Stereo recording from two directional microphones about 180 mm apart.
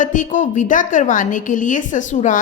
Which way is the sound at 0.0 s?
45° left (ahead or behind).